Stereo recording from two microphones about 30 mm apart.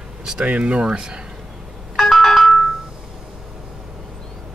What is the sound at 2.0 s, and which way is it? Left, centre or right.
Ringtone, centre.